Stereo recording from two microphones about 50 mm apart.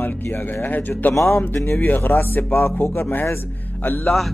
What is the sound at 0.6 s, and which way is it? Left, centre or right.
Speech, left.